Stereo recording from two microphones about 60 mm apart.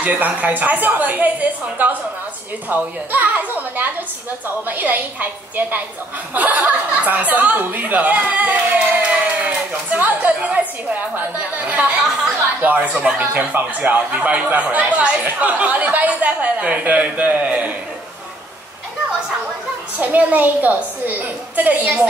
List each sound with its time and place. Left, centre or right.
0.2 s a woman's voice: right
20.0 s speech: right